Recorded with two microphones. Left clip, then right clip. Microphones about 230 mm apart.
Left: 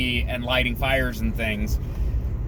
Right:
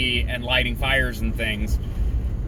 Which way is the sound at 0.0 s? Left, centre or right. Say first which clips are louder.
Right 2 dB; centre.